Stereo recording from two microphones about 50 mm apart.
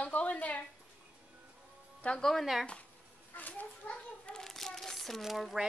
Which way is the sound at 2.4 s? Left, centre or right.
Centre.